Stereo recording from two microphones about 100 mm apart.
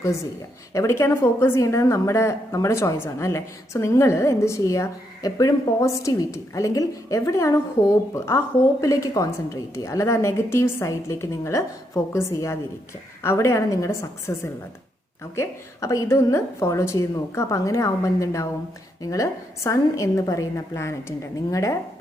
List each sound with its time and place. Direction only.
0.7 s a woman's voice: 30° left (ahead or behind)